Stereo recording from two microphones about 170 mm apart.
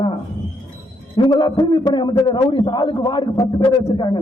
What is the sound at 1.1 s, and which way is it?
A man's voice, 25° left (ahead or behind).